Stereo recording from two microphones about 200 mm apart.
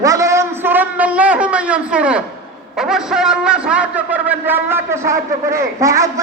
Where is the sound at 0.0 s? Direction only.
15° right (ahead or behind).